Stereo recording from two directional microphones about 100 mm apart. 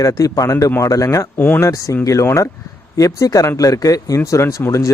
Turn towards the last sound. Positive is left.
turn(degrees=30)  # may be behind; listen again after turning